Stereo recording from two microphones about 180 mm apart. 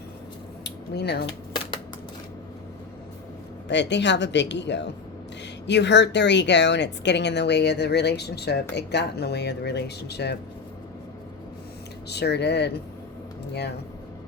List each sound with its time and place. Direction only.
0.6 s a sound: 65° left (ahead or behind)
3.7 s a woman's voice: 75° left (ahead or behind)
12.0 s a woman's voice: 65° left (ahead or behind)